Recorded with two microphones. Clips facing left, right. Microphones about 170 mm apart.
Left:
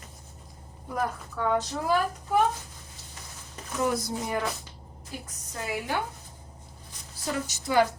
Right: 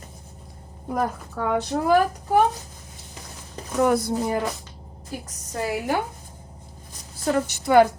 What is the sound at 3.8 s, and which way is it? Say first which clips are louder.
Speech: right 7 dB; 60° right (ahead or behind).